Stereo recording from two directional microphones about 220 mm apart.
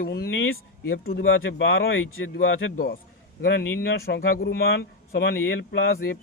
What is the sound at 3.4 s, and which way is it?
Speech, 45° left (ahead or behind).